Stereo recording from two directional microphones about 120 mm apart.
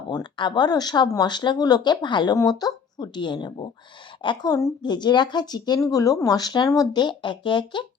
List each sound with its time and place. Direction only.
0.1 s speech: 40° left (ahead or behind)